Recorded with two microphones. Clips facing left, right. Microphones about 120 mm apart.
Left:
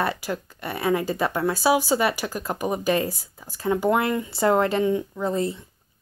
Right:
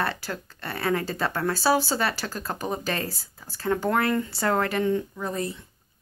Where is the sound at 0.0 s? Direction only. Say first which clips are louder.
Left 3 dB; 15° left (ahead or behind).